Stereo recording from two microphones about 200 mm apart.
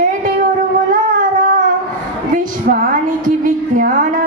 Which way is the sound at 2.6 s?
40° right (ahead or behind).